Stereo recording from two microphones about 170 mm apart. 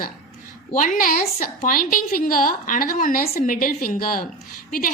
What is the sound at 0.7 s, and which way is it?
A woman's voice, 55° left (ahead or behind).